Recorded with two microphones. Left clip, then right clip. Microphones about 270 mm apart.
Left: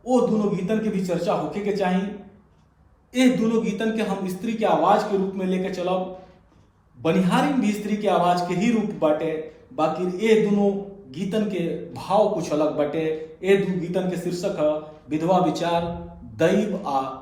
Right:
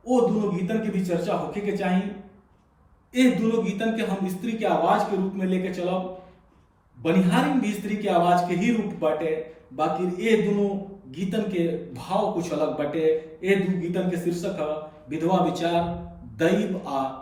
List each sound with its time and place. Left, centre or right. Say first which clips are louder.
0.0 s a man's voice: left 1 dB; centre
3.1 s a man's voice: left 1 dB; centre
7.0 s a man's voice: left 2 dB; centre